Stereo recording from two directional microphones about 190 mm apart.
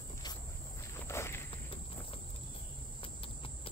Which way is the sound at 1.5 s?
30° left (ahead or behind).